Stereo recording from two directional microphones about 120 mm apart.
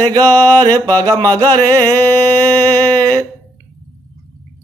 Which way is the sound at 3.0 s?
30° right (ahead or behind).